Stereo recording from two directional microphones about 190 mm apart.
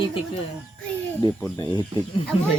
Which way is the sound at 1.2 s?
20° left (ahead or behind).